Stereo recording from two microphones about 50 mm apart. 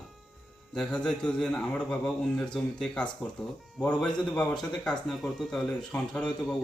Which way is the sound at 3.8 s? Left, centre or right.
Centre.